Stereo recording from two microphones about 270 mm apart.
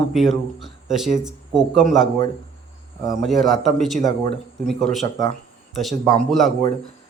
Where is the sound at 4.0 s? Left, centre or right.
Centre.